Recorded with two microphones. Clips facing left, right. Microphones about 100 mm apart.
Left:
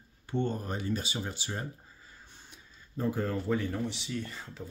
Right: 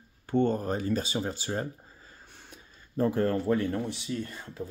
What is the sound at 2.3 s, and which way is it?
Speech, 60° right (ahead or behind).